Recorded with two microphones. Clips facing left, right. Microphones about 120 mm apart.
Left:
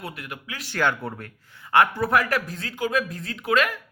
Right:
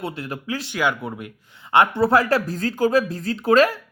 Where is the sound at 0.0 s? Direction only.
30° right (ahead or behind).